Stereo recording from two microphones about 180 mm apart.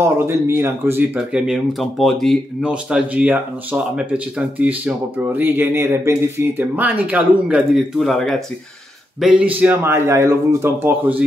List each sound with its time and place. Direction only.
0.0 s speech: 15° right (ahead or behind)